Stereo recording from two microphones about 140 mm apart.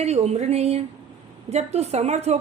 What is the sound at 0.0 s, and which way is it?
A woman's voice, 50° right (ahead or behind).